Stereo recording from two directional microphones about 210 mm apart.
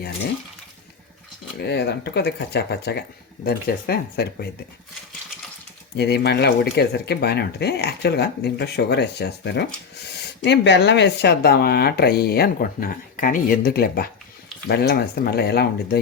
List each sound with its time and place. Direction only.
1.5 s speech: 50° left (ahead or behind)
6.0 s speech: 50° left (ahead or behind)